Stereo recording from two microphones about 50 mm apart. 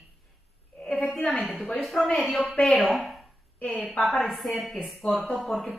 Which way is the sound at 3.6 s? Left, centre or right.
Left.